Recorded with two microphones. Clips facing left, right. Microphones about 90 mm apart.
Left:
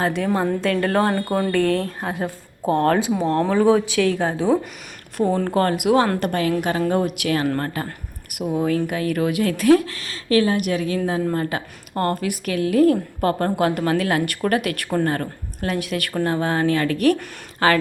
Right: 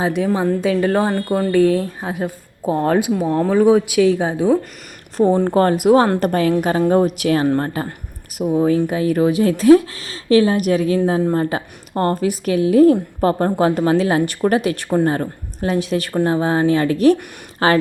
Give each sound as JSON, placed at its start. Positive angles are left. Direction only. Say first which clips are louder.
{"t": 0.0, "sound": "speech", "louder": "right 3 dB", "side_deg": -10}
{"t": 0.4, "sound": "a woman's voice", "louder": "right 4 dB", "side_deg": 0}
{"t": 7.4, "sound": "speech", "louder": "right 5 dB", "side_deg": -20}